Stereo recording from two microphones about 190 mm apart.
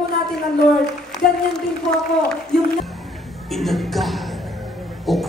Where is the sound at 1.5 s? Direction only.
Centre (ahead or behind).